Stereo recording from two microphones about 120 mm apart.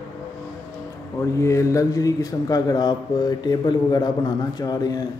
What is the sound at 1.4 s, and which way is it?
A man's voice, 25° left (ahead or behind).